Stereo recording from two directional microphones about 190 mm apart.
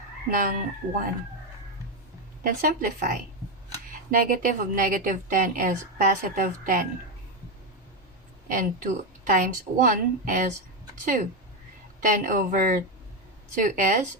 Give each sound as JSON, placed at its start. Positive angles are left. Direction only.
{"t": 0.3, "sound": "a woman's voice", "side_deg": -45}
{"t": 2.4, "sound": "a woman's voice", "side_deg": -45}
{"t": 8.4, "sound": "a woman's voice", "side_deg": -45}